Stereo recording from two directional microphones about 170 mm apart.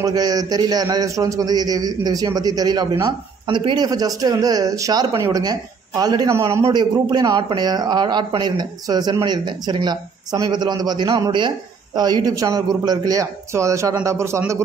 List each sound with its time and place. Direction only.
0.0 s a man's voice: 20° right (ahead or behind)